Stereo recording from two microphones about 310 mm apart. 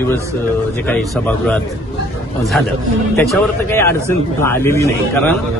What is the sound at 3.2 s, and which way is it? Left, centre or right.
A man's voice, centre.